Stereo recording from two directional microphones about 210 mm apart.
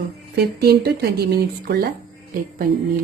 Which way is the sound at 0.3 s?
50° right (ahead or behind).